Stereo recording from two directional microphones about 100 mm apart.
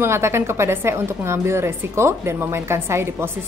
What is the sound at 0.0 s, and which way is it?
A woman's voice, 25° right (ahead or behind).